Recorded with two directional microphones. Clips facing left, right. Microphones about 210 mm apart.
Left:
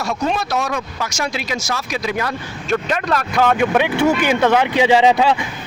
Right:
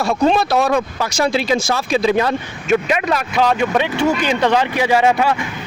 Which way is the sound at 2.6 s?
10° right (ahead or behind).